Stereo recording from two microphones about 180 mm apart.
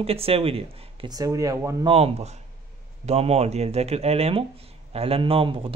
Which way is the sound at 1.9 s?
35° right (ahead or behind).